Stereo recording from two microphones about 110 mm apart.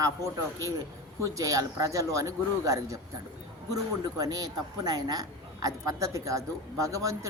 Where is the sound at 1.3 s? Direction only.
30° right (ahead or behind).